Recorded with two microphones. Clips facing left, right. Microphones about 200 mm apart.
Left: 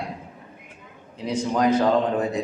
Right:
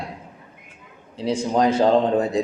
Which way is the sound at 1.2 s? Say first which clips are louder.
Right 2 dB; 30° right (ahead or behind).